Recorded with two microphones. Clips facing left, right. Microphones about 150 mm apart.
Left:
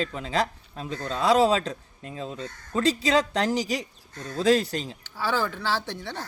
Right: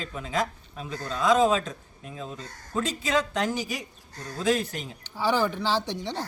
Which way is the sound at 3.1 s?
35° left (ahead or behind).